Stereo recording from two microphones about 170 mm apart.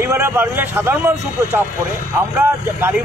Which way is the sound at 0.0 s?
15° right (ahead or behind).